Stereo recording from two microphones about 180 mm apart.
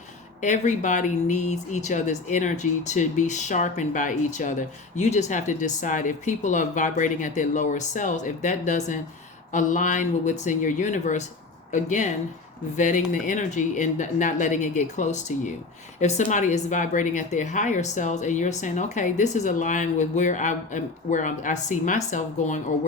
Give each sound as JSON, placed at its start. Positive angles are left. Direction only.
{"t": 0.4, "sound": "speech", "side_deg": 40}